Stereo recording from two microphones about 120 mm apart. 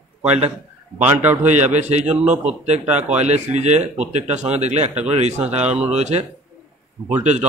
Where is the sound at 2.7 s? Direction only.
70° right (ahead or behind).